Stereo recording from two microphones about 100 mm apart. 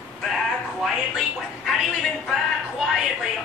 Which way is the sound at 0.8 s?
Centre (ahead or behind).